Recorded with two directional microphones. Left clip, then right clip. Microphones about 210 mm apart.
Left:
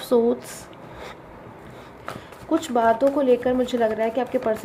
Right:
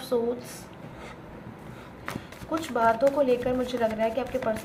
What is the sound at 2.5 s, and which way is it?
Speech, 35° left (ahead or behind).